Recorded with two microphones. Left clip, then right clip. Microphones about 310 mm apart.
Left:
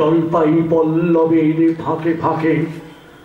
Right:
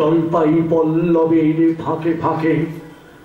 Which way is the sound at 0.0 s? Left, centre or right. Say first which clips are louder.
Left 1 dB; centre.